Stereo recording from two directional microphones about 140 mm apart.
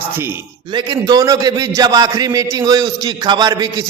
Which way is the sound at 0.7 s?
35° right (ahead or behind).